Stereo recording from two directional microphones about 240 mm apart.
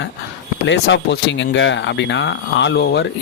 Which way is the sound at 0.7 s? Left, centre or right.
Left.